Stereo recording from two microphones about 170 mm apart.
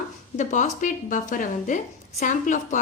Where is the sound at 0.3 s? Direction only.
45° left (ahead or behind).